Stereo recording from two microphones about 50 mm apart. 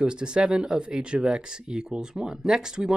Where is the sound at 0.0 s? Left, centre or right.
Centre.